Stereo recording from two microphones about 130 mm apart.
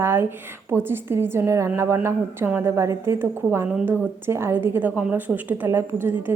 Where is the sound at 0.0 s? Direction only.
20° right (ahead or behind).